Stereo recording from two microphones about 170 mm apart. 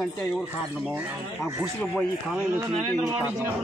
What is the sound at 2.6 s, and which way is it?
Speech, 20° right (ahead or behind).